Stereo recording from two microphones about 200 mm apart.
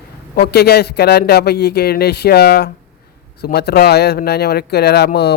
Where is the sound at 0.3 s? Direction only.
55° left (ahead or behind).